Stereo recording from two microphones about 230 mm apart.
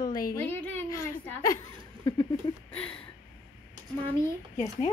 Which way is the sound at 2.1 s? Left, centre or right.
Centre.